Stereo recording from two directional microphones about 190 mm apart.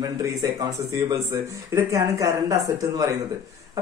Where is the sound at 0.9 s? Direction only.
15° right (ahead or behind).